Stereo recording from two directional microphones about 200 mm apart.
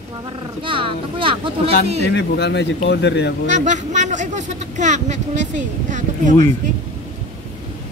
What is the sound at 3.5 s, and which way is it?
A man's voice, 40° right (ahead or behind).